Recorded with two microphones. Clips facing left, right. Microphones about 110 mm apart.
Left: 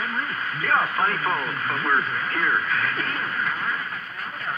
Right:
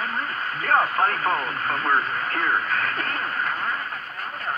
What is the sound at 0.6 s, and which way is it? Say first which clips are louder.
Speech: right 2 dB; 40° right (ahead or behind).